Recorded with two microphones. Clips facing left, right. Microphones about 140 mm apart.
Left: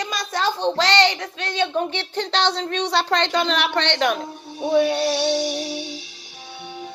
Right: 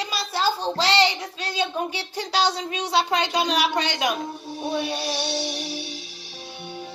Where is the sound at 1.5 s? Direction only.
10° right (ahead or behind).